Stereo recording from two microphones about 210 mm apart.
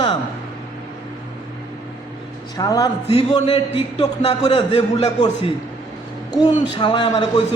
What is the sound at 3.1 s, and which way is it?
A man's voice, 25° left (ahead or behind).